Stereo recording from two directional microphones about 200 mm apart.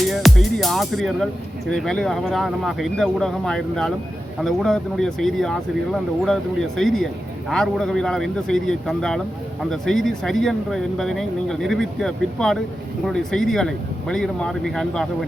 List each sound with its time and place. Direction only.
0.1 s speech: centre (ahead or behind)